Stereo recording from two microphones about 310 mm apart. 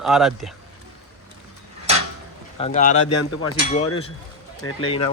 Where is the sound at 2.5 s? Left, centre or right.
Left.